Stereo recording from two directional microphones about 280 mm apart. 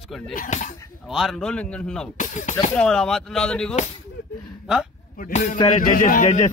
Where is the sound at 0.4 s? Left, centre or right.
Left.